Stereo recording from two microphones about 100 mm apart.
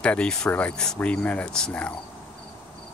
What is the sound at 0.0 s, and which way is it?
Speech, 10° left (ahead or behind).